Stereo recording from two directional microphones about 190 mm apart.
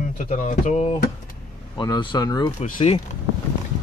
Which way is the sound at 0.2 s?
45° left (ahead or behind).